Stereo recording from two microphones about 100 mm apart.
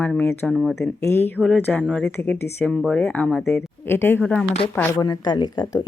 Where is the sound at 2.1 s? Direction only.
20° left (ahead or behind).